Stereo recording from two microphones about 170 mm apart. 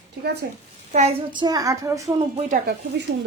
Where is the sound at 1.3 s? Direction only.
25° right (ahead or behind).